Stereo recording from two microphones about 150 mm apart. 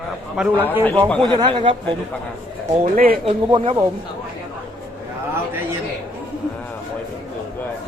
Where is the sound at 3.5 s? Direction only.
35° right (ahead or behind).